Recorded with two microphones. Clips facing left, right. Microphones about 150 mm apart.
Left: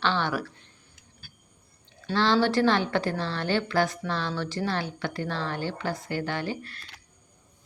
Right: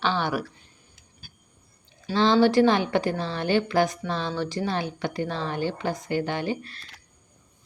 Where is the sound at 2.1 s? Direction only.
15° right (ahead or behind).